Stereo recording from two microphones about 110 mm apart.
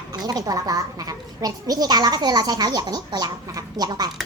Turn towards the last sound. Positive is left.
turn(degrees=-35)  # may be behind; listen again after turning